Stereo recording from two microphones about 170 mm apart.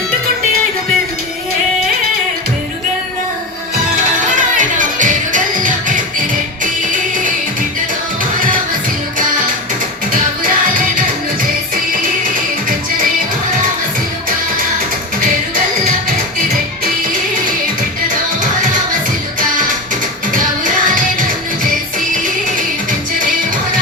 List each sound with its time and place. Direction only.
4.4 s music: 50° right (ahead or behind)
10.1 s music: 55° right (ahead or behind)
16.8 s music: 50° right (ahead or behind)
20.8 s music: 50° right (ahead or behind)